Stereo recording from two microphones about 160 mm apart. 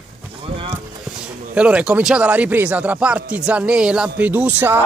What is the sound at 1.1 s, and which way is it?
Speech, 5° right (ahead or behind).